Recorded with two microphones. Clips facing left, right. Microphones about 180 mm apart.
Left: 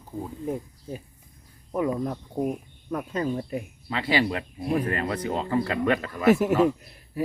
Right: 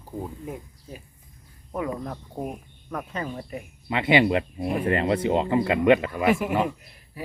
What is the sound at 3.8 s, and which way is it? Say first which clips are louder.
Speech: right 5 dB; 20° right (ahead or behind).